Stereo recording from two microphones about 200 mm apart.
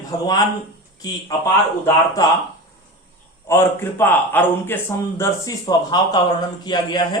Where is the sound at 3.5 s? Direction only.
10° left (ahead or behind).